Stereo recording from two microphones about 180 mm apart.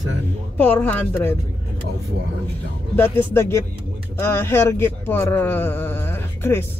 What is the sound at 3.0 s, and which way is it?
Speech, 15° left (ahead or behind).